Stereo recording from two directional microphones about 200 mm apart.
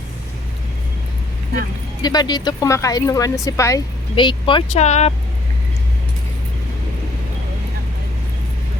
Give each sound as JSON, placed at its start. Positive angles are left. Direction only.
{"t": 2.0, "sound": "speech", "side_deg": 20}